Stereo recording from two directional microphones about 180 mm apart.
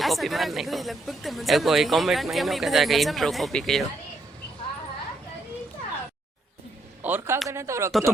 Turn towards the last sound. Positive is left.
turn(degrees=-15)  # may be behind; listen again after turning